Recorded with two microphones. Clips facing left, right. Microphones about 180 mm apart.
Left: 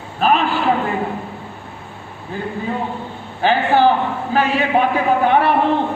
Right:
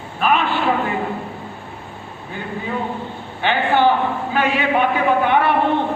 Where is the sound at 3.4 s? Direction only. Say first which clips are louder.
Left 2 dB; 40° left (ahead or behind).